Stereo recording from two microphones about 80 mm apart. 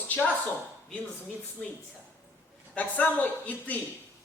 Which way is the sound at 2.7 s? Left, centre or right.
Centre.